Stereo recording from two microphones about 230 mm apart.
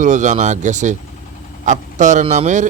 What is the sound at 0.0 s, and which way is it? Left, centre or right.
Speech, right.